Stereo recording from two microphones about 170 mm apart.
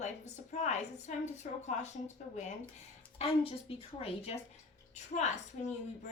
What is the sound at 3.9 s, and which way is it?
A woman's voice, 35° left (ahead or behind).